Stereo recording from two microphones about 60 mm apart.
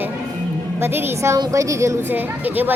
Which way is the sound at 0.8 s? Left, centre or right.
Right.